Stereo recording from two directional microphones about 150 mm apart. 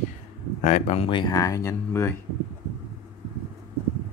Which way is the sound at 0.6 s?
50° left (ahead or behind).